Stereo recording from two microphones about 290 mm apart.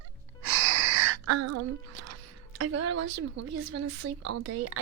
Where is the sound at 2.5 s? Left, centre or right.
Right.